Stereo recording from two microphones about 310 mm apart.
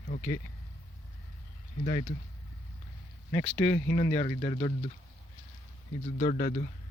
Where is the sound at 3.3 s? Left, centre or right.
Centre.